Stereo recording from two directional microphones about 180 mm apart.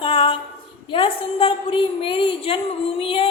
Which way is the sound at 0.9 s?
30° left (ahead or behind).